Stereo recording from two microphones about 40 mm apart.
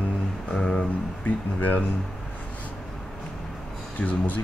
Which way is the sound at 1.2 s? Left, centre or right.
Left.